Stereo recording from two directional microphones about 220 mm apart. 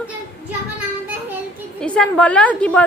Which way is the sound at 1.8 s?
5° left (ahead or behind).